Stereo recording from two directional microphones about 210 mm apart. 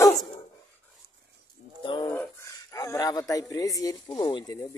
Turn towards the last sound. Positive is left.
turn(degrees=20)  # may be behind; listen again after turning